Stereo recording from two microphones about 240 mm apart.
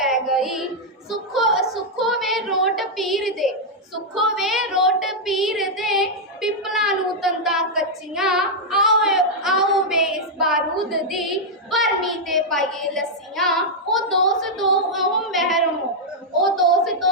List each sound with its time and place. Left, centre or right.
0.0 s child singing: centre
1.3 s music: centre
4.1 s child singing: centre
14.1 s a sound: centre